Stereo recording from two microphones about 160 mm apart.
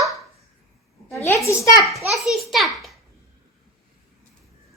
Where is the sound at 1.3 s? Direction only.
20° left (ahead or behind).